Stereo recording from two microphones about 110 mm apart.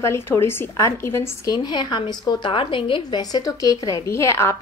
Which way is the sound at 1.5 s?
40° left (ahead or behind).